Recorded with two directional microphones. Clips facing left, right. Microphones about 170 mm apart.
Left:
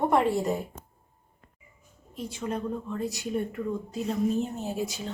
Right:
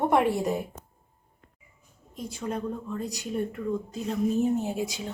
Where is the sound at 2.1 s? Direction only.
Centre (ahead or behind).